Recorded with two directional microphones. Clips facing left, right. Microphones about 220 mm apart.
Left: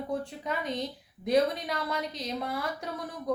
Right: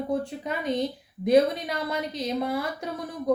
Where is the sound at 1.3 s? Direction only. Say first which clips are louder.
Right 5 dB; 5° right (ahead or behind).